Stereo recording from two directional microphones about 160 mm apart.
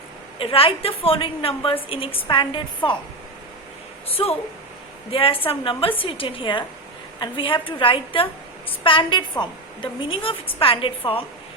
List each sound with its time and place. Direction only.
0.3 s a woman's voice: 35° left (ahead or behind)
4.1 s a woman's voice: 40° left (ahead or behind)